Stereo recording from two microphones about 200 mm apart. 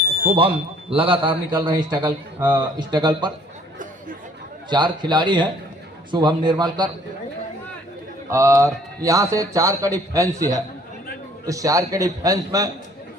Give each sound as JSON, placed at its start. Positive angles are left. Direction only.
{"t": 0.0, "sound": "speech", "side_deg": -30}
{"t": 4.7, "sound": "speech", "side_deg": -20}
{"t": 8.3, "sound": "a man's voice", "side_deg": -15}